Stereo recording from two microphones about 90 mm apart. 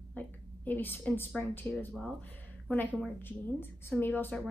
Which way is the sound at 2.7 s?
20° left (ahead or behind).